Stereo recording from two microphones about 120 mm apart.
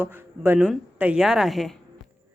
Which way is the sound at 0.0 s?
15° right (ahead or behind).